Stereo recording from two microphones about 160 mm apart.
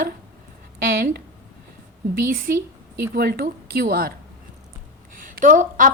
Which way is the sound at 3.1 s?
75° right (ahead or behind).